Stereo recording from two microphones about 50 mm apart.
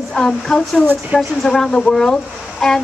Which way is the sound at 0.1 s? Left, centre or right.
Centre.